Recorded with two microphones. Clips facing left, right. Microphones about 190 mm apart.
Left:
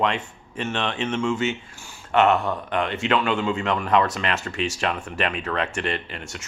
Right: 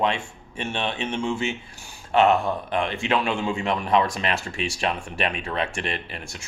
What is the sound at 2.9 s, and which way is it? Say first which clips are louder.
Speech: left 2 dB; 15° right (ahead or behind).